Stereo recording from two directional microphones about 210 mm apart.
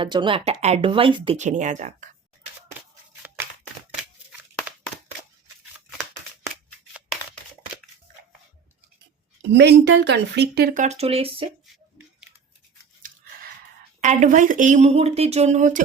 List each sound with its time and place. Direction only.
0.0 s speech: 25° right (ahead or behind)
1.4 s speech: 35° right (ahead or behind)
4.3 s a sound: 5° right (ahead or behind)
9.4 s speech: 55° right (ahead or behind); by 11.4 s 30° right (ahead or behind)
14.0 s speech: 35° right (ahead or behind)